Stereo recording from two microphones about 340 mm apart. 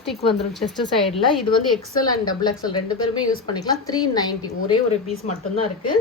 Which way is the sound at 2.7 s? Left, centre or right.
Left.